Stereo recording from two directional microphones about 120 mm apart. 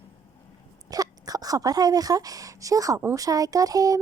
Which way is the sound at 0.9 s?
30° right (ahead or behind).